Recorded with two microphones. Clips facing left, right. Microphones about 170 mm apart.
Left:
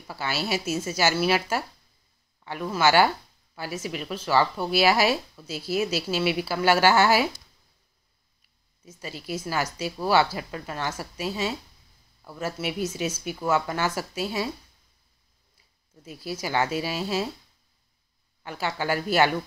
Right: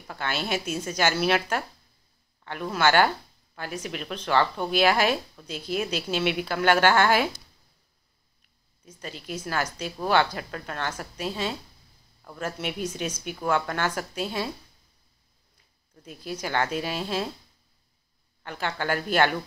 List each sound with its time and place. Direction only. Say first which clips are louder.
0.1 s speech: left 1 dB; 5° left (ahead or behind)
8.8 s speech: left 2 dB; 10° left (ahead or behind)
16.0 s speech: left 1 dB; 5° left (ahead or behind)
18.4 s speech: left 1 dB; 10° left (ahead or behind)